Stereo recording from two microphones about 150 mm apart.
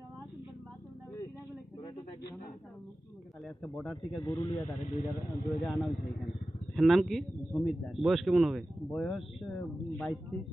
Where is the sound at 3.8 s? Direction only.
Centre (ahead or behind).